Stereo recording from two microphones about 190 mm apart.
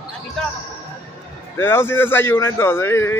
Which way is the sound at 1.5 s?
10° left (ahead or behind).